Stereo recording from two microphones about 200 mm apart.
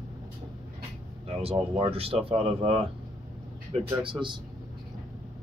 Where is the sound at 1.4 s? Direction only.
30° right (ahead or behind).